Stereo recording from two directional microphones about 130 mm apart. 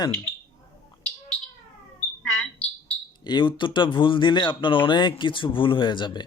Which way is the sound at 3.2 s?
35° left (ahead or behind).